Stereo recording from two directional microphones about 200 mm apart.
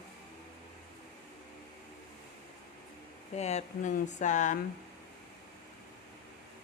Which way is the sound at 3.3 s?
35° left (ahead or behind).